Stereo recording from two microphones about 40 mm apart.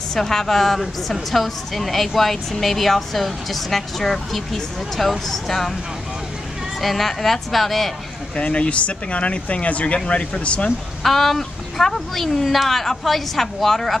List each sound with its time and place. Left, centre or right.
0.1 s speech: centre
6.8 s speech: centre
8.4 s speech: left
11.0 s speech: centre